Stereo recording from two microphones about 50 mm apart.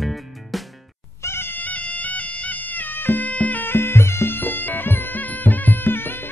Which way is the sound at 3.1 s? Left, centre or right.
Left.